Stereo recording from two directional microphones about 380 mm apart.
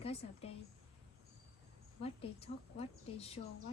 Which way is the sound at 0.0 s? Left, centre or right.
Centre.